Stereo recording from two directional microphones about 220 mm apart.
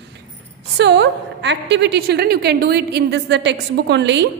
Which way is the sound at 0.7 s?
50° right (ahead or behind).